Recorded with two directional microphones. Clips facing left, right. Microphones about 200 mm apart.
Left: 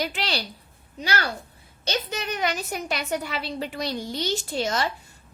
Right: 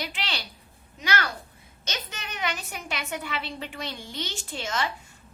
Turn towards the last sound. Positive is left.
turn(degrees=40)  # may be behind; listen again after turning